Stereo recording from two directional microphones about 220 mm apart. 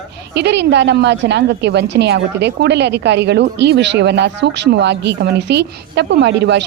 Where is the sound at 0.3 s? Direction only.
50° right (ahead or behind).